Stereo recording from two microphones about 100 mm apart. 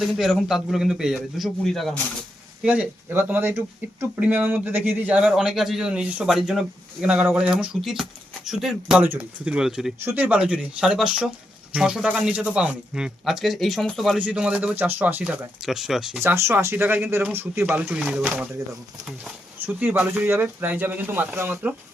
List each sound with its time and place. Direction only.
0.0 s speech: 5° right (ahead or behind)
2.6 s a man's voice: 10° right (ahead or behind)
10.0 s a man's voice: 20° right (ahead or behind); by 14.2 s centre (ahead or behind)
14.2 s a man's voice: 10° right (ahead or behind)
15.6 s speech: 5° right (ahead or behind)
16.2 s speech: 25° right (ahead or behind)
17.9 s a man's voice: 5° right (ahead or behind)
19.5 s speech: 20° right (ahead or behind)